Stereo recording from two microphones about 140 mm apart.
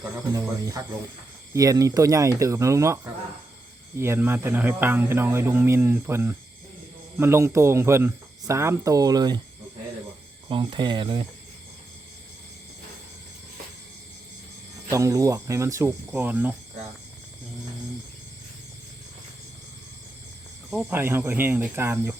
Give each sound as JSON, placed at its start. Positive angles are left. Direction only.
{"t": 0.0, "sound": "speech", "side_deg": -20}
{"t": 10.5, "sound": "speech", "side_deg": -35}
{"t": 14.8, "sound": "speech", "side_deg": -25}
{"t": 20.9, "sound": "speech", "side_deg": -15}